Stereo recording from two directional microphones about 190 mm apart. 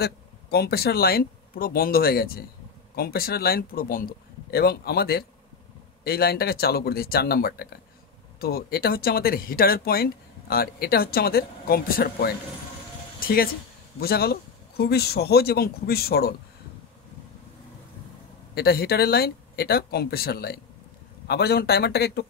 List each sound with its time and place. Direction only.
0.0 s a man's voice: 55° left (ahead or behind)
13.9 s a man's voice: 55° left (ahead or behind)
18.5 s a man's voice: 55° left (ahead or behind)